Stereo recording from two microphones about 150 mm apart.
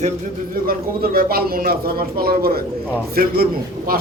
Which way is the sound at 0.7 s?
90° right.